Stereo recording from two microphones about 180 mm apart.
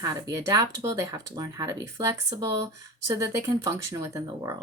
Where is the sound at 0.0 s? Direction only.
20° right (ahead or behind).